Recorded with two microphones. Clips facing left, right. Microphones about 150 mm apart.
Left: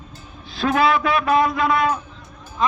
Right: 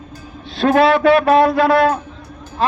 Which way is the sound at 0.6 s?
55° right (ahead or behind).